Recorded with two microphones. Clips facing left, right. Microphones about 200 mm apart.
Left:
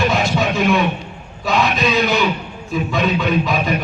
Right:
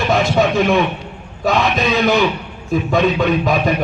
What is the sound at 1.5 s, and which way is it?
A man's voice, 50° right (ahead or behind).